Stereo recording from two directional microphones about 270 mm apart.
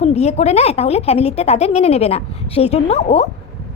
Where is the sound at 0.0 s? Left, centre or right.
Left.